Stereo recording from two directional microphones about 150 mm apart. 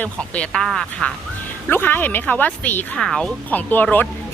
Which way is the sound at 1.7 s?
15° left (ahead or behind).